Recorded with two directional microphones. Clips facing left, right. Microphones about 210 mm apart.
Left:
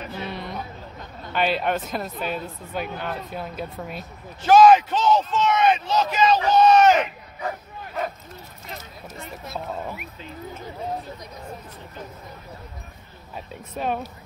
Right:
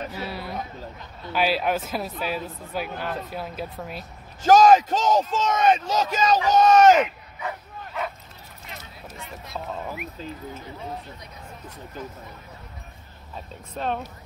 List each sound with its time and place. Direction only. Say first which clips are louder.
0.1 s a sound: left 1 dB; 5° right (ahead or behind)
1.3 s speech: even; 5° right (ahead or behind)
4.4 s speech: left 1 dB; 40° right (ahead or behind)
13.7 s speech: left 1 dB; 10° left (ahead or behind)